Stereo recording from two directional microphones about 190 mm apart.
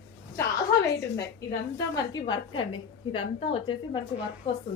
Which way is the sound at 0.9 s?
20° left (ahead or behind).